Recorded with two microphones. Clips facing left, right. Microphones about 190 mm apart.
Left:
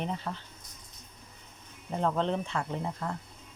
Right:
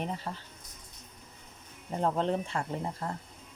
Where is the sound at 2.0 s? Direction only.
40° right (ahead or behind).